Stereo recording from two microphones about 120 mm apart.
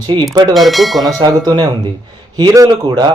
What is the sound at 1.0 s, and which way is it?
Speech, 35° right (ahead or behind).